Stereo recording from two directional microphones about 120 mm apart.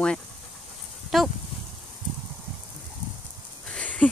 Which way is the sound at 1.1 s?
Centre (ahead or behind).